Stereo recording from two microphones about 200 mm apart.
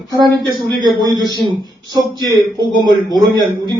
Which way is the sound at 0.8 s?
20° right (ahead or behind).